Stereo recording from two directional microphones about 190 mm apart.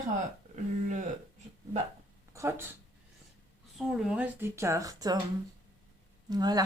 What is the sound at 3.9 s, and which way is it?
Speech, 5° right (ahead or behind).